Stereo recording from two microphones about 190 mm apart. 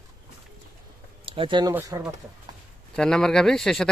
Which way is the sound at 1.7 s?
15° right (ahead or behind).